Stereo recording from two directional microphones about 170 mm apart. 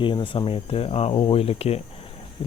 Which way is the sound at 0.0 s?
30° left (ahead or behind).